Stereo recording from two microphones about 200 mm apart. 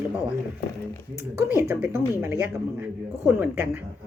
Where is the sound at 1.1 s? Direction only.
15° right (ahead or behind).